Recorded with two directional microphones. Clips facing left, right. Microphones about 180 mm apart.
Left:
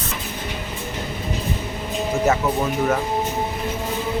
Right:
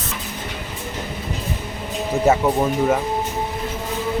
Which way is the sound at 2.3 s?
30° right (ahead or behind).